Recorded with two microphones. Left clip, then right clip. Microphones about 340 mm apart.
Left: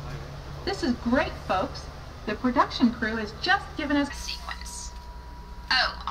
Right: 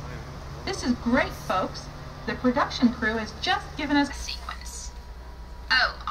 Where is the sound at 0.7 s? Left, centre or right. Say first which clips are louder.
Even; centre.